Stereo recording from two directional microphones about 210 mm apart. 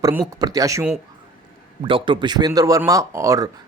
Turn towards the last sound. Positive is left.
turn(degrees=-15)  # may be behind; listen again after turning